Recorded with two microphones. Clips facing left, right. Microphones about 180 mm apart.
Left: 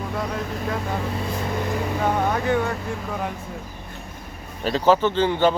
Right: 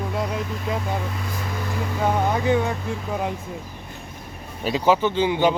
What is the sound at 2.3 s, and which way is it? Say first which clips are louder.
Speech: right 1 dB; 10° right (ahead or behind).